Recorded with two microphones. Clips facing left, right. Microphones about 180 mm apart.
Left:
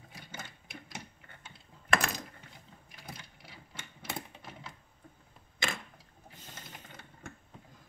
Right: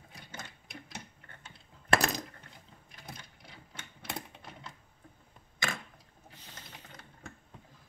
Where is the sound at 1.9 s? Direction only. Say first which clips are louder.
Right 3 dB; 35° right (ahead or behind).